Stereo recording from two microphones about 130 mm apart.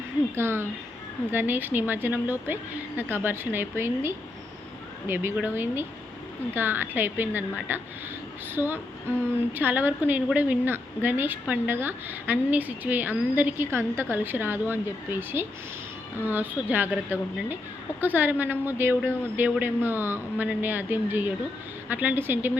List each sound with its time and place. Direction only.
0.3 s a woman's voice: 20° right (ahead or behind)
6.5 s a woman's voice: 15° right (ahead or behind)